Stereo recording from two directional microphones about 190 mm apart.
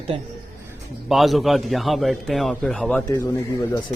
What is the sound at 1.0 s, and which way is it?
A man's voice, centre (ahead or behind).